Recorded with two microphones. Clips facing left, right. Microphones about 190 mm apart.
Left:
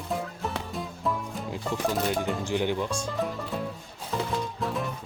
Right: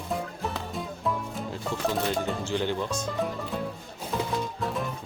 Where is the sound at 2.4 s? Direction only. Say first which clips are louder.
Left 1 dB; 15° left (ahead or behind).